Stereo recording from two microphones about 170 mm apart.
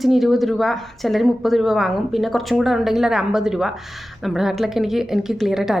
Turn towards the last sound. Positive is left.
turn(degrees=0)  # may be behind; listen again after turning